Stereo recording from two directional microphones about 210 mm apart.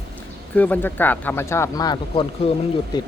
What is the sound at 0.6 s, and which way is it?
Speech, 5° left (ahead or behind).